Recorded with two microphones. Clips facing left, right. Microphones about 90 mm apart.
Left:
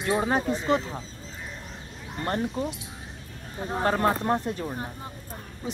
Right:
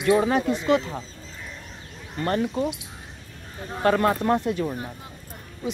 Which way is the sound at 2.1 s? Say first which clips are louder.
Right 4 dB; 25° left (ahead or behind).